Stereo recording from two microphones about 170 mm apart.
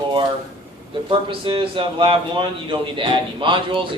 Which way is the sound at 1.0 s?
30° right (ahead or behind).